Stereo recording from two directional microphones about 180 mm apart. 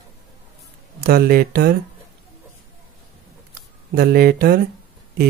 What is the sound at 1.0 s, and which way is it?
Speech, 55° right (ahead or behind).